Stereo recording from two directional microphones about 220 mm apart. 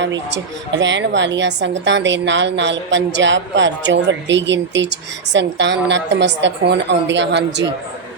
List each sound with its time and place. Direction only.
0.0 s a woman's voice: 55° right (ahead or behind)